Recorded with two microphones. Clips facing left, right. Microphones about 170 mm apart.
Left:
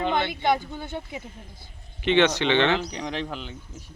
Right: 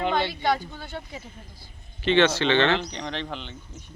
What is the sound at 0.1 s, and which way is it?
Speech, 20° left (ahead or behind).